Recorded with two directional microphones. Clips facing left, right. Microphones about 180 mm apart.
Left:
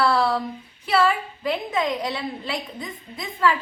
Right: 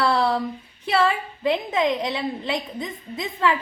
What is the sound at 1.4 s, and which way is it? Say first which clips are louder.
A woman's voice: right 3 dB; 20° right (ahead or behind).